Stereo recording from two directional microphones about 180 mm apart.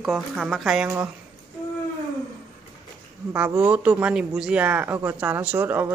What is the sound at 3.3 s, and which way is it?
Speech, 10° right (ahead or behind).